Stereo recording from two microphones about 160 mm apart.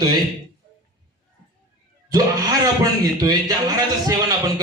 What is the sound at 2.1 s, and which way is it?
A man's voice, 25° right (ahead or behind).